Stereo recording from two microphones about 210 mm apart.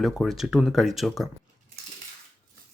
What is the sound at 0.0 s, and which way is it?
Speech, centre (ahead or behind).